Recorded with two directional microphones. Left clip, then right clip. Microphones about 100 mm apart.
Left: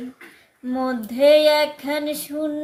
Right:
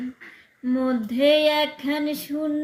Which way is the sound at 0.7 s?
35° left (ahead or behind).